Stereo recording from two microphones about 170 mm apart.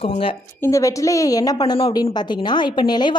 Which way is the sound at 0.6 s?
20° left (ahead or behind).